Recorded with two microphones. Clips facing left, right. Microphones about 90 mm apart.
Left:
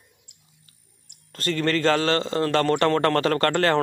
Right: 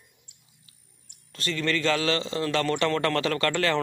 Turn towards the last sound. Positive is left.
turn(degrees=40)  # may be behind; listen again after turning